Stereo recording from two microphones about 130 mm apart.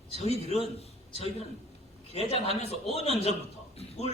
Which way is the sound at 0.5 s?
50° left (ahead or behind).